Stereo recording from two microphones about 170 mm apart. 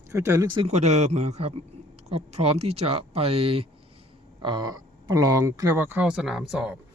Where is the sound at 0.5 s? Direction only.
40° right (ahead or behind).